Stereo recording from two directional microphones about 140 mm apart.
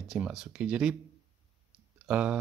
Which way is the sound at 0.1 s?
5° right (ahead or behind).